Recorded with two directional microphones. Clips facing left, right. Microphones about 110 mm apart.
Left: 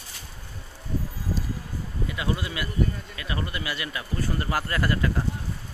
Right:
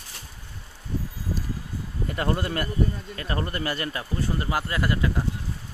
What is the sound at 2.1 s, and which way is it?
Speech, 45° right (ahead or behind).